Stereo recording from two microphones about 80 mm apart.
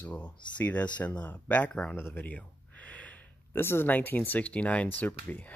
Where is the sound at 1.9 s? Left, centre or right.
Left.